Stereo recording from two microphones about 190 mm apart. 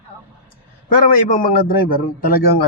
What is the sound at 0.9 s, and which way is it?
Speech, 45° left (ahead or behind).